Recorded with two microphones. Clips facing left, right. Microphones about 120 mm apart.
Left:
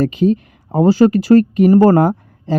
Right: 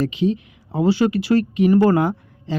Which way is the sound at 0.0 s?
45° left (ahead or behind).